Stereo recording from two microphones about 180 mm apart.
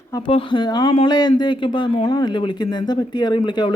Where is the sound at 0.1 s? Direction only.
25° left (ahead or behind).